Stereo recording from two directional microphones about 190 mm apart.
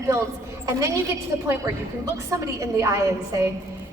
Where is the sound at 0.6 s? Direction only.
15° right (ahead or behind).